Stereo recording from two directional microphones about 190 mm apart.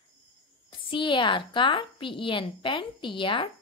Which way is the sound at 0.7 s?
25° left (ahead or behind).